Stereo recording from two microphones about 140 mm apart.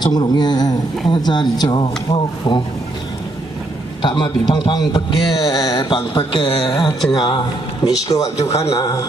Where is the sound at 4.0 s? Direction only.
35° left (ahead or behind).